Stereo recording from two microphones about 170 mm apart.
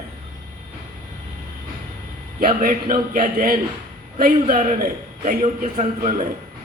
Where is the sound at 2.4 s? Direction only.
55° right (ahead or behind).